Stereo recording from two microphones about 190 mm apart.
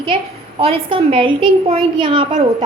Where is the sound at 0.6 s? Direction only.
30° right (ahead or behind).